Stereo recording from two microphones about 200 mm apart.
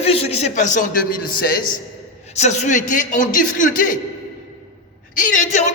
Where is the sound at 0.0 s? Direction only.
30° left (ahead or behind).